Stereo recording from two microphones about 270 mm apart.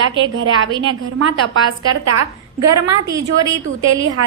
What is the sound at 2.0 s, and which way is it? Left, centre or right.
Speech, right.